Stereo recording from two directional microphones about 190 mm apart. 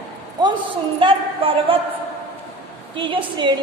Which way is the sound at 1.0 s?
30° right (ahead or behind).